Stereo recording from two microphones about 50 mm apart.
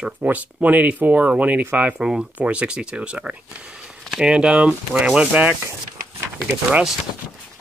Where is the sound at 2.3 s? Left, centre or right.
Right.